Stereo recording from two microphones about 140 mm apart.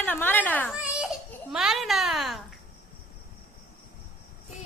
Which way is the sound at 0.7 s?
5° right (ahead or behind).